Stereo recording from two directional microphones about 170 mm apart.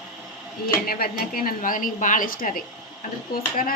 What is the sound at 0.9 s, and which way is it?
A woman's voice, 60° left (ahead or behind).